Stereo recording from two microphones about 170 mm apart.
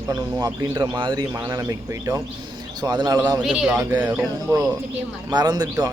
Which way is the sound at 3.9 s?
20° right (ahead or behind).